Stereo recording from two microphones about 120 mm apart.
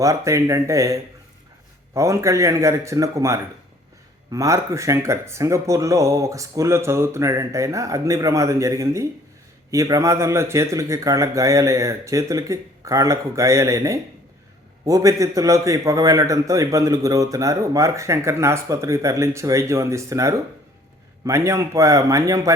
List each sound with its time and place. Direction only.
0.0 s a man's voice: 25° right (ahead or behind)